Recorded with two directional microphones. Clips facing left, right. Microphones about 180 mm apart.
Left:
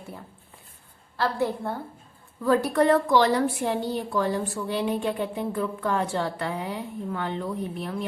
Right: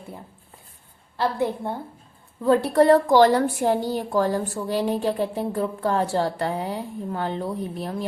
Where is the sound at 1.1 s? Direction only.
20° right (ahead or behind); by 8.1 s 35° right (ahead or behind).